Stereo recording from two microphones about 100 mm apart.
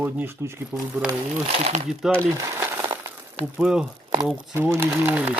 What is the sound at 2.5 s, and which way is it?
Crushing, 20° right (ahead or behind).